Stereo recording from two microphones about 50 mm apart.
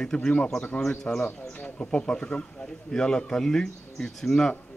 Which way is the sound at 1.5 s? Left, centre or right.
Left.